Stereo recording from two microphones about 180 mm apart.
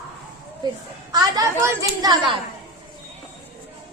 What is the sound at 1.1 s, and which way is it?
A woman's voice, 20° right (ahead or behind).